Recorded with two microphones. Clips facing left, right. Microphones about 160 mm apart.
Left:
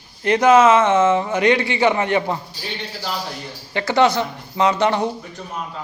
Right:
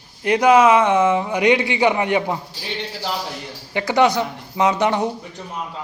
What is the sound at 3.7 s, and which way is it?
Speech, 15° right (ahead or behind).